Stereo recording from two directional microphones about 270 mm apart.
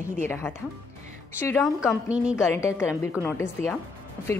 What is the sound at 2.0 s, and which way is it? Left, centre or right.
Speech, centre.